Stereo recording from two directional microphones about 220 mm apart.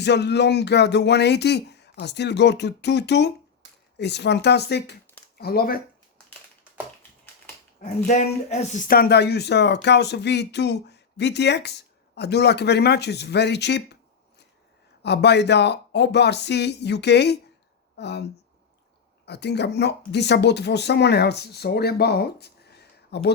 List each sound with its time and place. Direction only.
0.0 s speech: 50° left (ahead or behind)
7.8 s speech: 30° left (ahead or behind); by 23.3 s 50° left (ahead or behind)